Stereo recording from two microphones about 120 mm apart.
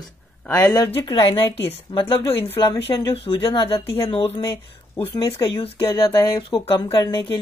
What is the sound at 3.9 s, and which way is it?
Speech, 55° left (ahead or behind).